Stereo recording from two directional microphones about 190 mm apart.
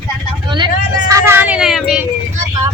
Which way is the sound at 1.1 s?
15° right (ahead or behind).